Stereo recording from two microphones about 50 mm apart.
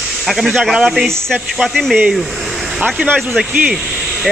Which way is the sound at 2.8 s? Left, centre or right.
Right.